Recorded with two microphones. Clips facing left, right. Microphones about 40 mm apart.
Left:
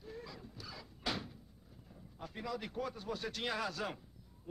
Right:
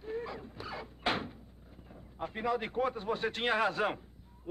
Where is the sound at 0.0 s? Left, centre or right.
Right.